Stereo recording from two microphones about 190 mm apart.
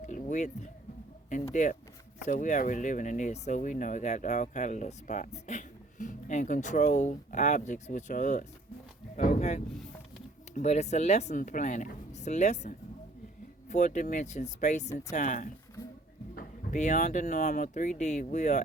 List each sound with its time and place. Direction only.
0.0 s music: 40° left (ahead or behind)
2.2 s speech: 40° left (ahead or behind)